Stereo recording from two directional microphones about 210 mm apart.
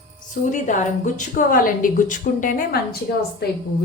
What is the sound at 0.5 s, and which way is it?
A woman's voice, 35° left (ahead or behind).